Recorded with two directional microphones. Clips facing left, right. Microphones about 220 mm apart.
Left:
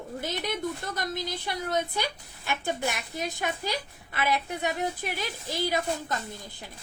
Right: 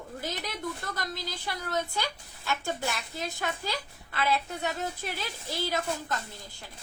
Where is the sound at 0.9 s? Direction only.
20° left (ahead or behind).